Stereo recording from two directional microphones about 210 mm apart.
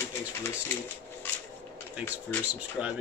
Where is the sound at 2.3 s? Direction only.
5° left (ahead or behind).